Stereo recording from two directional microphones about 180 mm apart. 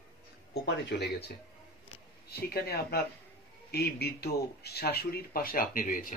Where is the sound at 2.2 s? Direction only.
60° left (ahead or behind).